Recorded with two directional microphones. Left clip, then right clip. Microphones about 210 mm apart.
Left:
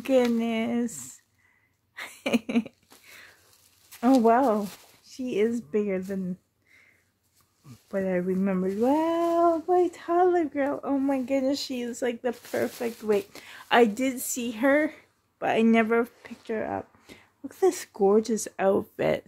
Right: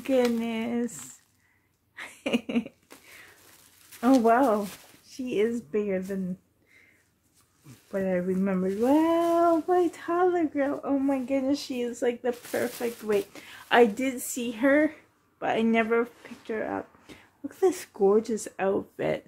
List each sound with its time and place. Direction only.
0.0 s speech: 50° left (ahead or behind)
2.0 s a sound: 50° left (ahead or behind)
4.2 s speech: 40° left (ahead or behind)
7.9 s speech: 50° left (ahead or behind)